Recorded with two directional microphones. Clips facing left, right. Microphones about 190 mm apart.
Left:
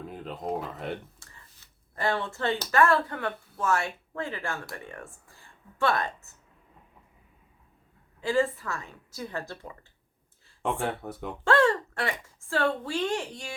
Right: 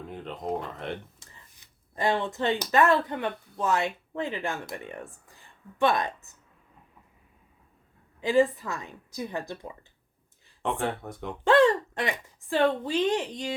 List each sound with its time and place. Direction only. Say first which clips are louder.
0.0 s speech: even; 5° left (ahead or behind)
1.2 s speech: even; 15° right (ahead or behind)
8.2 s a woman's voice: right 3 dB; 15° right (ahead or behind)
10.6 s speech: even; centre (ahead or behind)
11.4 s speech: right 3 dB; 15° right (ahead or behind)